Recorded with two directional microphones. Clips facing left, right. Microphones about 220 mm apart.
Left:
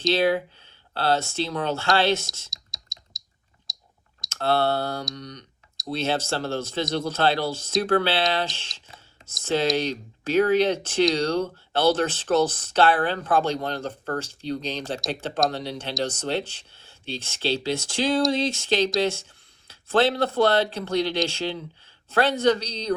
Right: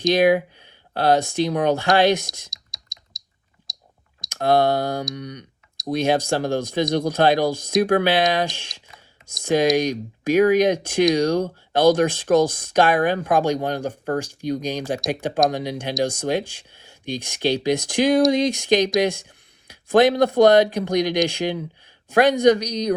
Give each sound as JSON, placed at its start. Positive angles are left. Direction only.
{"t": 0.0, "sound": "speech", "side_deg": -15}
{"t": 2.5, "sound": "typing", "side_deg": 0}
{"t": 3.7, "sound": "clicking", "side_deg": 0}
{"t": 4.3, "sound": "a sound", "side_deg": -15}
{"t": 5.1, "sound": "speech", "side_deg": -10}